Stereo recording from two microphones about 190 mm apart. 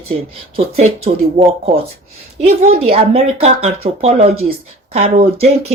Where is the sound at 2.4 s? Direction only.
35° right (ahead or behind).